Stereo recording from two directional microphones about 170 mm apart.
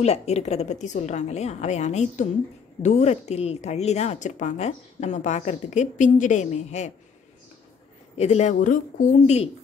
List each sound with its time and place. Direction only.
0.0 s a woman's voice: 40° left (ahead or behind)
8.2 s a woman's voice: 40° left (ahead or behind)